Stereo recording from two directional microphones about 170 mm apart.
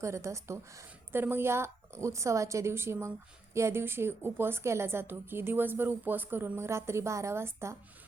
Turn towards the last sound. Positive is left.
turn(degrees=-15)  # may be behind; listen again after turning